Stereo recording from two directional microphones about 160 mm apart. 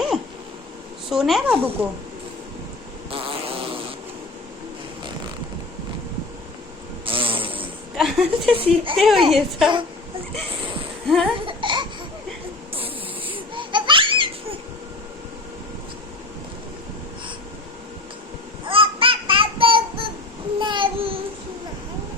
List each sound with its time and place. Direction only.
1.1 s speech: 5° right (ahead or behind)
3.1 s insect: 35° right (ahead or behind)
7.0 s a sound: 35° right (ahead or behind)
7.9 s a sound: centre (ahead or behind)
8.5 s speech: 35° right (ahead or behind)
9.0 s speech: centre (ahead or behind)
11.0 s laughter: centre (ahead or behind)
11.3 s laughter: 30° right (ahead or behind)
18.6 s a sound: 35° right (ahead or behind)